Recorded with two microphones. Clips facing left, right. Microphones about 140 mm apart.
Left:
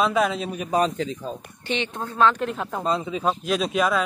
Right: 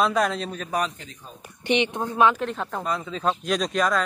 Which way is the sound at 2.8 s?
25° left (ahead or behind).